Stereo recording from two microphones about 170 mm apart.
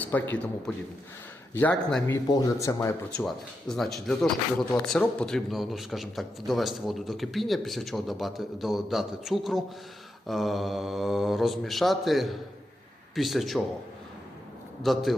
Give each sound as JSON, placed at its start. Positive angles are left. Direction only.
{"t": 0.0, "sound": "a man's voice", "side_deg": 10}
{"t": 2.1, "sound": "speech", "side_deg": 20}
{"t": 3.2, "sound": "a man's voice", "side_deg": 0}
{"t": 14.8, "sound": "a man's voice", "side_deg": 0}